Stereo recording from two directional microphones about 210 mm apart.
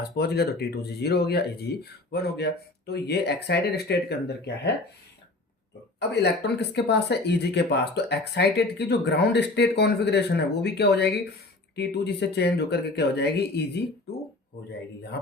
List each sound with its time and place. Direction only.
0.0 s speech: 50° left (ahead or behind)
6.0 s speech: 55° left (ahead or behind)